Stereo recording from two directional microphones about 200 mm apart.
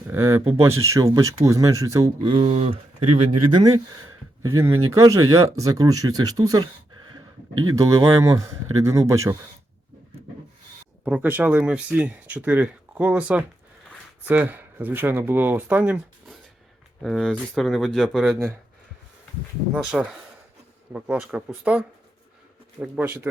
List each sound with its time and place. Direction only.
0.1 s speech: 15° right (ahead or behind); by 3.6 s 30° right (ahead or behind)
4.4 s speech: 15° right (ahead or behind)
7.5 s speech: 90° right
7.8 s speech: 15° right (ahead or behind)
11.0 s speech: 5° right (ahead or behind)
19.7 s speech: centre (ahead or behind)